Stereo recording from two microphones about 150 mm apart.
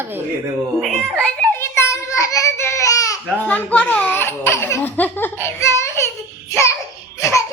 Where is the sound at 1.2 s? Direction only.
15° left (ahead or behind).